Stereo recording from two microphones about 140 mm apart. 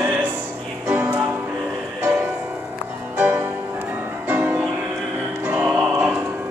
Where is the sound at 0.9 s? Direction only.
10° right (ahead or behind).